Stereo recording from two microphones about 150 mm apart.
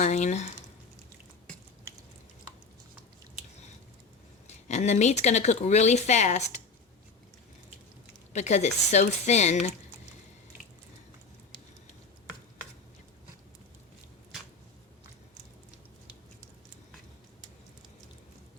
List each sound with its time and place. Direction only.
0.0 s speech: 50° left (ahead or behind)
4.4 s speech: 50° left (ahead or behind)
8.3 s speech: 50° left (ahead or behind)